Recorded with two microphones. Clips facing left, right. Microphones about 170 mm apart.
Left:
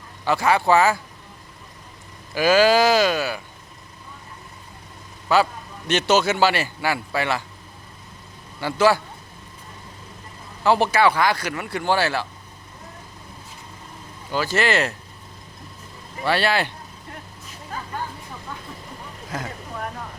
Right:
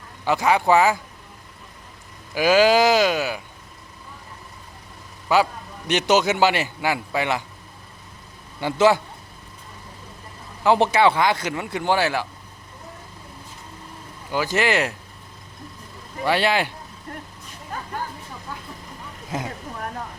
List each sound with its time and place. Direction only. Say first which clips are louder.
0.3 s a man's voice: even; 15° right (ahead or behind)
2.3 s a man's voice: even; 15° right (ahead or behind)
5.3 s a man's voice: even; 15° right (ahead or behind)
8.6 s speech: right 1 dB; 20° right (ahead or behind)
10.6 s speech: right 1 dB; 20° right (ahead or behind)
14.3 s a man's voice: even; 15° right (ahead or behind)
16.2 s a man's voice: right 1 dB; 15° right (ahead or behind)
19.3 s speech: right 2 dB; 20° right (ahead or behind)